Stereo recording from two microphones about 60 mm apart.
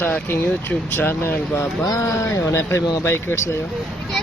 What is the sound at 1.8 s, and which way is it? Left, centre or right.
Speech, left.